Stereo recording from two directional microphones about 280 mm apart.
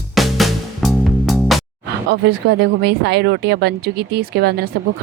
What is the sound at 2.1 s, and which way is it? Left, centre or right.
A woman's voice, right.